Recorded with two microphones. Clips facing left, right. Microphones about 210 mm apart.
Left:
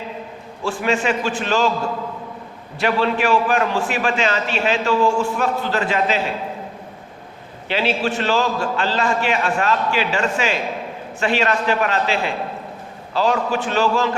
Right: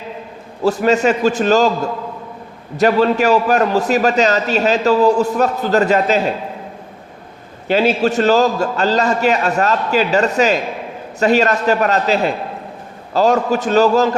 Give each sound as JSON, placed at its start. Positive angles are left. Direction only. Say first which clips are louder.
{"t": 0.6, "sound": "a man's voice", "louder": "right 7 dB", "side_deg": -40}
{"t": 2.7, "sound": "a man's voice", "louder": "right 6 dB", "side_deg": -40}
{"t": 7.7, "sound": "a man's voice", "louder": "right 6 dB", "side_deg": -45}